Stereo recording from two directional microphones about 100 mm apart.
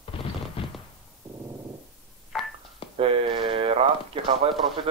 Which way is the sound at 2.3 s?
Centre (ahead or behind).